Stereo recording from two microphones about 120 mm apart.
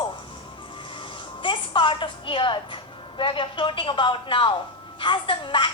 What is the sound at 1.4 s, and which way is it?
A woman's voice, 45° left (ahead or behind).